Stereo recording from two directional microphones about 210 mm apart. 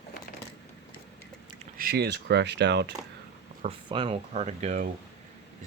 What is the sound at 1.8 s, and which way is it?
Speech, 50° right (ahead or behind).